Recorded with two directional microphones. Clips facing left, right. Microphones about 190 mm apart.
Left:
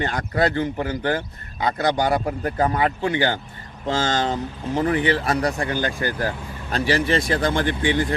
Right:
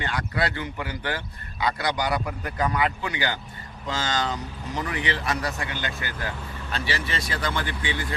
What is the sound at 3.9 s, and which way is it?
Speech, 50° left (ahead or behind).